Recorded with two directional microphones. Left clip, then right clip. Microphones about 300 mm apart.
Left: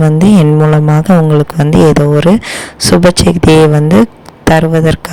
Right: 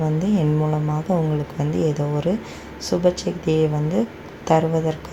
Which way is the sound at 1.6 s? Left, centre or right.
Left.